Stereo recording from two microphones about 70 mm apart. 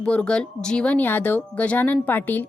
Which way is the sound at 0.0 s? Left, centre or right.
Centre.